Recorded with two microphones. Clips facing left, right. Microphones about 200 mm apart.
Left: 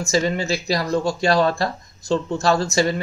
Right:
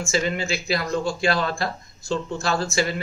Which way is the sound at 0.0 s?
40° left (ahead or behind).